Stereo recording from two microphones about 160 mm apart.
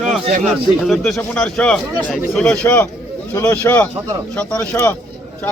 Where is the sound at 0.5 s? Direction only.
Centre (ahead or behind).